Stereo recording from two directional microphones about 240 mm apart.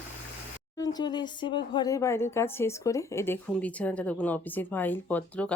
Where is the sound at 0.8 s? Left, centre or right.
Centre.